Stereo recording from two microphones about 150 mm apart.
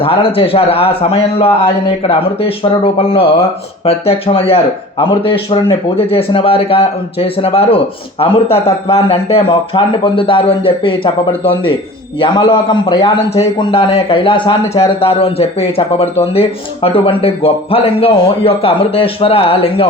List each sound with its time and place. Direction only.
0.0 s a man's voice: 40° left (ahead or behind)